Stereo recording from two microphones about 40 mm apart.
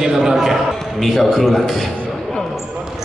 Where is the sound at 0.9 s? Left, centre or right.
Centre.